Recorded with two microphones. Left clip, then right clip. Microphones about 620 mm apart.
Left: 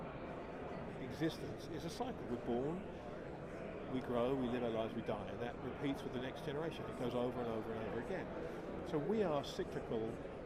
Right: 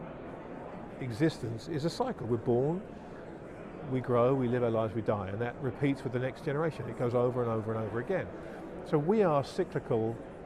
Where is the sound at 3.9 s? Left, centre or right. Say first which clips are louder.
Right 11 dB; right.